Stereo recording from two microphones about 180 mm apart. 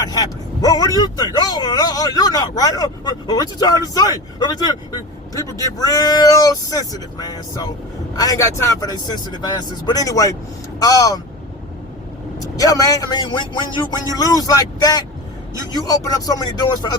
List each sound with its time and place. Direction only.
0.0 s speech: 20° left (ahead or behind)
12.4 s speech: 20° left (ahead or behind)